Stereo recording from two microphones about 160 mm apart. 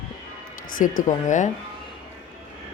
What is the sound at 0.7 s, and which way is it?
Speech, 55° left (ahead or behind).